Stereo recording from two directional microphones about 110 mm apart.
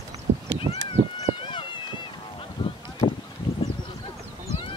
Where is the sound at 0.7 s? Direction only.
70° right (ahead or behind).